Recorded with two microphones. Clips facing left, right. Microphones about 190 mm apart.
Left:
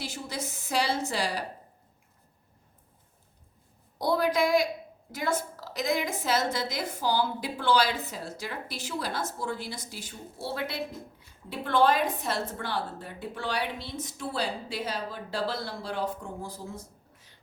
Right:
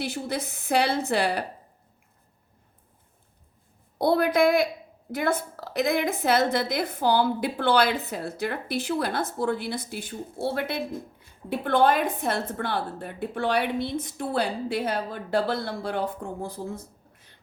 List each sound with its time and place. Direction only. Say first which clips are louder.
0.0 s a woman's voice: right 6 dB; 60° right (ahead or behind)
3.9 s a woman's voice: right 5 dB; 60° right (ahead or behind)